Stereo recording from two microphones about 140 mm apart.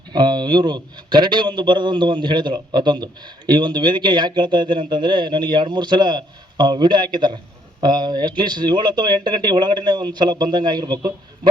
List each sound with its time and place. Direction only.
0.1 s a man's voice: 30° right (ahead or behind)